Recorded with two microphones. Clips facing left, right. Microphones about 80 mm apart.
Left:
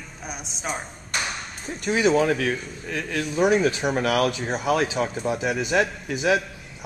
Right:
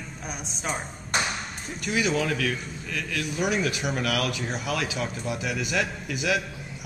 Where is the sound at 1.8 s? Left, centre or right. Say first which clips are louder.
Left 6 dB; left.